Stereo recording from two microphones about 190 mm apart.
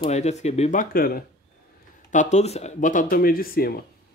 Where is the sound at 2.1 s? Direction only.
40° left (ahead or behind).